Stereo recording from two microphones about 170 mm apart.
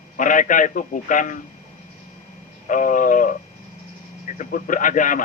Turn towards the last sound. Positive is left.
turn(degrees=50)  # may be behind; listen again after turning